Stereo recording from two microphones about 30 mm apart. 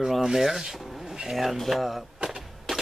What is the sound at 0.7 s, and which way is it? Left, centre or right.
Speech, centre.